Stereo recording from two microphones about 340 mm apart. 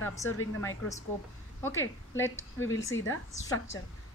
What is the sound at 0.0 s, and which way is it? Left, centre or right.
Speech, centre.